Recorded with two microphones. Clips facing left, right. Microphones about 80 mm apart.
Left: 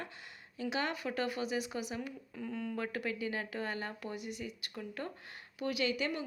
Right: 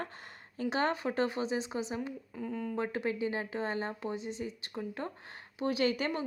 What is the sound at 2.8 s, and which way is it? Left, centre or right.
A woman's voice, right.